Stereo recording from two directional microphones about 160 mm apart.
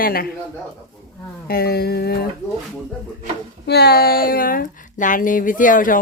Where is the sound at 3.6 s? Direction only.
90° left; by 5.9 s 55° left (ahead or behind).